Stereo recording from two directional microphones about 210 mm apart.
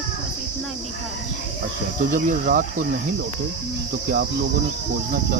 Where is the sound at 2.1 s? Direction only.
40° right (ahead or behind).